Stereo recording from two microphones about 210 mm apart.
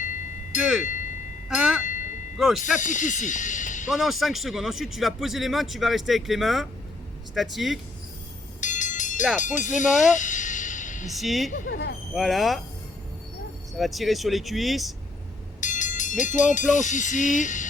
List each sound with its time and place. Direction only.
0.6 s speech: centre (ahead or behind)
2.7 s speech: 35° left (ahead or behind)
3.8 s speech: centre (ahead or behind)
8.6 s a sound: 35° left (ahead or behind)
9.4 s speech: 35° left (ahead or behind)
10.0 s music: 35° left (ahead or behind)
11.1 s speech: centre (ahead or behind)
11.5 s speech: 40° left (ahead or behind)
12.1 s speech: centre (ahead or behind)
13.7 s speech: centre (ahead or behind)
15.6 s speech: 35° left (ahead or behind)